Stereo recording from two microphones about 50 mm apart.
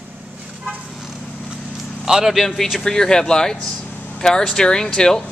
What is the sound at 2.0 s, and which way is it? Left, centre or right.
Speech, centre.